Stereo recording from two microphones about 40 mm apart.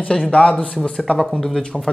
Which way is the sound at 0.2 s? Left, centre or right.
Left.